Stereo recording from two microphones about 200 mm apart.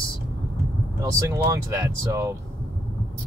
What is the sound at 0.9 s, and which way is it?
Speech, 15° right (ahead or behind).